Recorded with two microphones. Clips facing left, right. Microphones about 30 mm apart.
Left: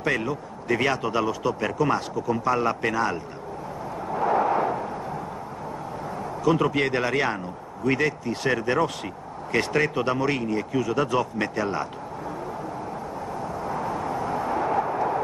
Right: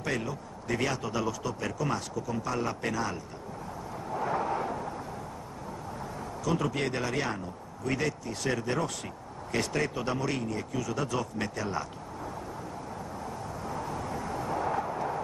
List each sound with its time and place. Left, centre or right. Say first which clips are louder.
0.0 s a man's voice: left 7 dB; left
4.1 s a sound: left 8 dB; left
6.4 s a man's voice: left 8 dB; left
13.7 s vehicle: left 7 dB; left